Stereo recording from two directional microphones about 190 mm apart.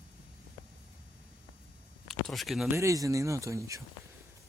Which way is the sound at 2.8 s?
15° right (ahead or behind).